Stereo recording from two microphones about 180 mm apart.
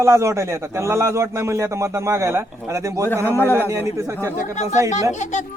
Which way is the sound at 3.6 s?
15° right (ahead or behind).